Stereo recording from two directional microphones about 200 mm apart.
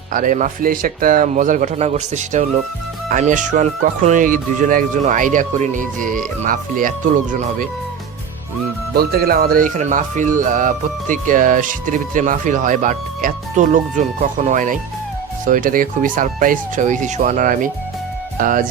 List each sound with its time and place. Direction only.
0.1 s speech: 40° right (ahead or behind)
9.0 s speech: 50° right (ahead or behind)